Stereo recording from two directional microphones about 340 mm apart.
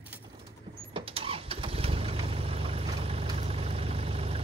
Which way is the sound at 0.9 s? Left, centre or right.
Centre.